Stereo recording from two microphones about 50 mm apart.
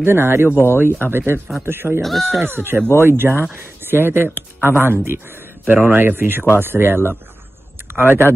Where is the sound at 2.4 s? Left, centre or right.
Right.